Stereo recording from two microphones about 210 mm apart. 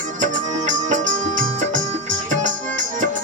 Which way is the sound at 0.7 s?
35° right (ahead or behind).